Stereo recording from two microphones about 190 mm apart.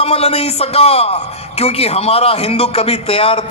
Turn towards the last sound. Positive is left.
turn(degrees=30)  # may be behind; listen again after turning